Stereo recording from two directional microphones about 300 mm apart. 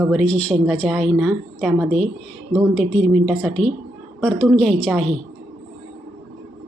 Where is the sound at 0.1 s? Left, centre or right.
Centre.